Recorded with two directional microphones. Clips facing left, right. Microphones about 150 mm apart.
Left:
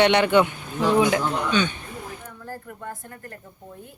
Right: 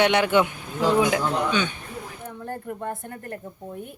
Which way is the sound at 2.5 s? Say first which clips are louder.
Right 5 dB; 25° right (ahead or behind).